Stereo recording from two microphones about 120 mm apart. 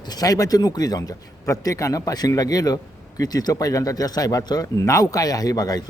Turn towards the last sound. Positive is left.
turn(degrees=30)  # may be behind; listen again after turning